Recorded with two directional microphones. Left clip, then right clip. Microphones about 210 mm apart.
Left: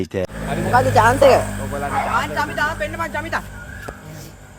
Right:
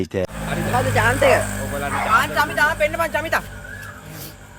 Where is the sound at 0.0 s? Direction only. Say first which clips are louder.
Even; centre (ahead or behind).